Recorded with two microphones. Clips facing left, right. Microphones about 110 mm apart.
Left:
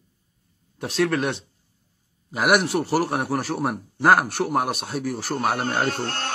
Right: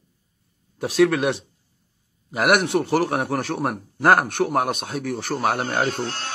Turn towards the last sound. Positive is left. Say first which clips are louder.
# left 1 dB
turn(degrees=60)  # may be behind; listen again after turning